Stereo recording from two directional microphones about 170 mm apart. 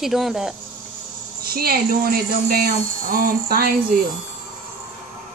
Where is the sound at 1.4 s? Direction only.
60° right (ahead or behind).